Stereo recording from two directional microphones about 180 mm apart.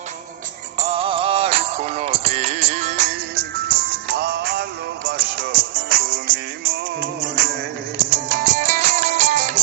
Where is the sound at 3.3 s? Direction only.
65° right (ahead or behind).